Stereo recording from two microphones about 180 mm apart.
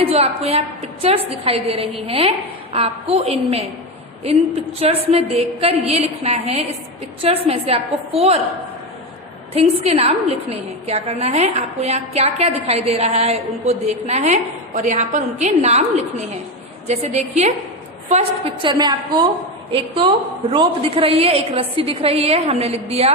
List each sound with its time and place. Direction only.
0.0 s a woman's voice: 35° right (ahead or behind)
4.8 s a woman's voice: 35° right (ahead or behind)
9.6 s a woman's voice: 35° right (ahead or behind)
16.8 s a woman's voice: 35° right (ahead or behind)